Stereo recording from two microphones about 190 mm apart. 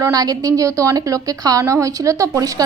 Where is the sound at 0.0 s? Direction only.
20° right (ahead or behind).